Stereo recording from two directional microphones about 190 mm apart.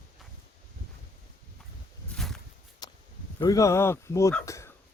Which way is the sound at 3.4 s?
20° left (ahead or behind).